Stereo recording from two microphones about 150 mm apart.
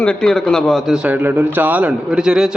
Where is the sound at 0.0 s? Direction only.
5° left (ahead or behind).